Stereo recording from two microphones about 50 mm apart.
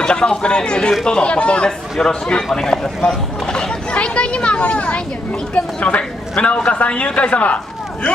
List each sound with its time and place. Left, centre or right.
0.0 s speech: centre
3.4 s a sound: centre
5.5 s speech: left